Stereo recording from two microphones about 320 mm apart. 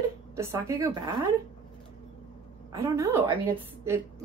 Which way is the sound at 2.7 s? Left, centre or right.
Centre.